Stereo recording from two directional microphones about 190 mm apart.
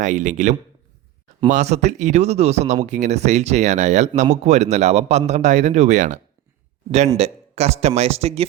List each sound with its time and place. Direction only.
0.0 s speech: 40° right (ahead or behind)
7.2 s speech: 35° right (ahead or behind)